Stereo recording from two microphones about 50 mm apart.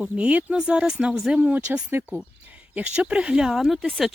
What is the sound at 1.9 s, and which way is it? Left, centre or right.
Speech, right.